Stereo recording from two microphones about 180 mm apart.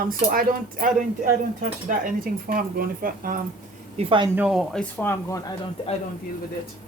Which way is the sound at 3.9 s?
30° right (ahead or behind).